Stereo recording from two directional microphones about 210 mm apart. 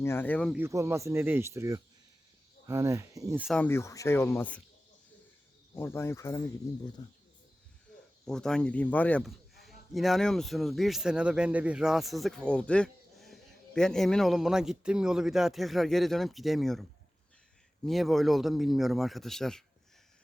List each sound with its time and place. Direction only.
0.0 s speech: 10° left (ahead or behind)
0.5 s speech: 10° right (ahead or behind)
3.4 s speech: 5° left (ahead or behind)
5.7 s speech: 10° left (ahead or behind)
8.2 s a man's voice: 5° left (ahead or behind)
17.8 s a man's voice: centre (ahead or behind)